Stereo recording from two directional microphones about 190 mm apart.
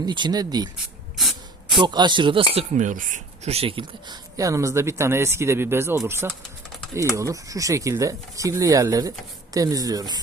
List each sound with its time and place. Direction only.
0.0 s speech: 20° right (ahead or behind)
1.1 s spray: centre (ahead or behind)
1.7 s speech: 25° right (ahead or behind)
2.7 s speech: 40° right (ahead or behind); by 10.2 s 20° right (ahead or behind)